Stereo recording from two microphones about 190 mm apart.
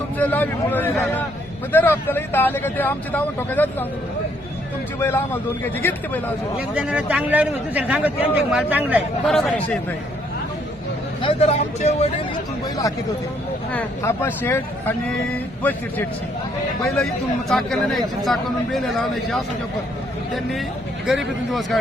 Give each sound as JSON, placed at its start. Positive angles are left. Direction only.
{"t": 0.2, "sound": "speech", "side_deg": 10}
{"t": 4.9, "sound": "speech", "side_deg": 10}
{"t": 6.6, "sound": "a man's voice", "side_deg": -5}
{"t": 11.2, "sound": "speech", "side_deg": 30}
{"t": 13.7, "sound": "speech", "side_deg": 10}
{"t": 17.5, "sound": "speech", "side_deg": 0}